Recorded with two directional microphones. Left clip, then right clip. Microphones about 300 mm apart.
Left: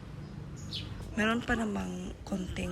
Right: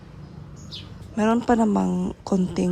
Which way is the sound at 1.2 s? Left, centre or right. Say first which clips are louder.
Right 10 dB; centre.